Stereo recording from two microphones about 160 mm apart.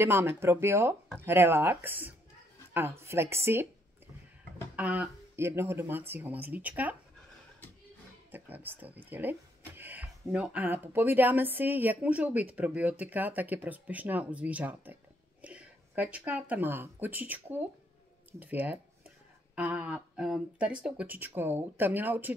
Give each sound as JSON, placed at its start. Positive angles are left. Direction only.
{"t": 0.0, "sound": "speech", "side_deg": -15}
{"t": 4.7, "sound": "speech", "side_deg": -10}
{"t": 8.3, "sound": "speech", "side_deg": -10}